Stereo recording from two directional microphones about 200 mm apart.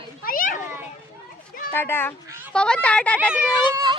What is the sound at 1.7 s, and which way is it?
Speech, 10° left (ahead or behind).